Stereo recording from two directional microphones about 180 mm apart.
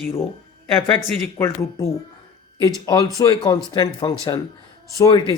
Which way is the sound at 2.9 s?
20° left (ahead or behind).